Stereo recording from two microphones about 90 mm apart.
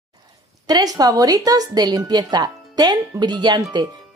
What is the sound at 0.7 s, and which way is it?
Speech, 50° right (ahead or behind).